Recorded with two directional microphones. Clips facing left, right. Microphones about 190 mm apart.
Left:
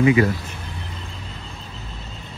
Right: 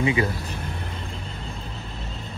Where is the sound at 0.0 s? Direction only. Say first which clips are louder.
Left 6 dB; 25° right (ahead or behind).